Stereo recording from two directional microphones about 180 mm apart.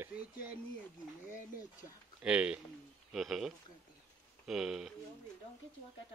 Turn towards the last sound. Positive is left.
turn(degrees=0)  # may be behind; listen again after turning